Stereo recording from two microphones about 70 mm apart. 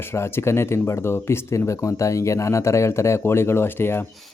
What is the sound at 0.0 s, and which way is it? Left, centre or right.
Speech, left.